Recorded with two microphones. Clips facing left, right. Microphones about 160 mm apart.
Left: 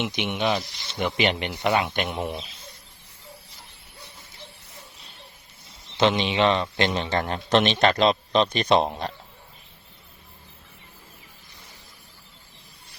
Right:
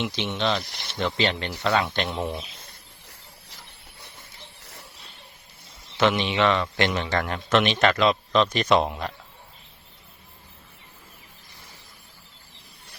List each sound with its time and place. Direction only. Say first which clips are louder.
0.0 s speech: left 1 dB; 15° left (ahead or behind)
0.7 s speech: right 2 dB; 65° right (ahead or behind)
0.9 s speech: left 1 dB; 15° left (ahead or behind)
6.0 s a man's voice: left 1 dB; 25° left (ahead or behind)